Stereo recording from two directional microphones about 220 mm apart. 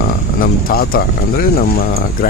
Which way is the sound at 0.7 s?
45° left (ahead or behind).